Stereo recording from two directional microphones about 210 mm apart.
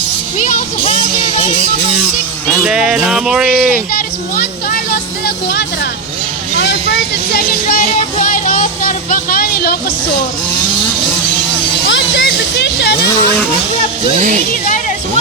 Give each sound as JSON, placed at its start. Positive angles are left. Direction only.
{"t": 0.3, "sound": "music", "side_deg": 40}
{"t": 2.6, "sound": "music", "side_deg": -5}
{"t": 3.9, "sound": "vehicle", "side_deg": 45}
{"t": 7.9, "sound": "a sound", "side_deg": 40}
{"t": 11.9, "sound": "music", "side_deg": 60}
{"t": 14.1, "sound": "speech", "side_deg": -35}